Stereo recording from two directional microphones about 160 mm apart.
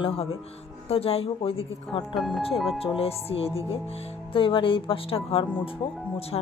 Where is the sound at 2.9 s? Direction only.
40° left (ahead or behind).